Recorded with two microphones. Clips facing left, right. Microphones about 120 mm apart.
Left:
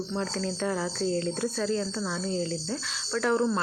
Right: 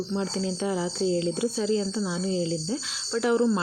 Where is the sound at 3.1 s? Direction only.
10° right (ahead or behind).